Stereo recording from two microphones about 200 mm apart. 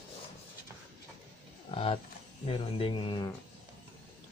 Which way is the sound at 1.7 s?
25° left (ahead or behind).